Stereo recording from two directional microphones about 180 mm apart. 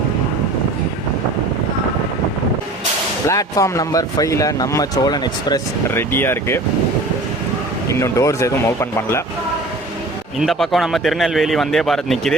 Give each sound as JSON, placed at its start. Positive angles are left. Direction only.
{"t": 3.2, "sound": "speech", "side_deg": 15}
{"t": 7.9, "sound": "speech", "side_deg": 15}
{"t": 10.4, "sound": "a man's voice", "side_deg": 0}